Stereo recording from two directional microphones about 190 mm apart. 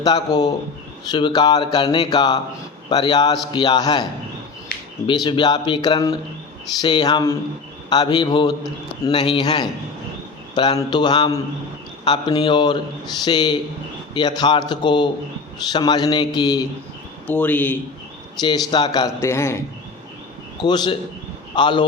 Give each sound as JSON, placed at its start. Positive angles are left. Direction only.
{"t": 0.0, "sound": "speech", "side_deg": 20}
{"t": 5.0, "sound": "speech", "side_deg": 20}
{"t": 17.2, "sound": "a man's voice", "side_deg": 10}
{"t": 18.3, "sound": "speech", "side_deg": 20}
{"t": 20.6, "sound": "speech", "side_deg": 25}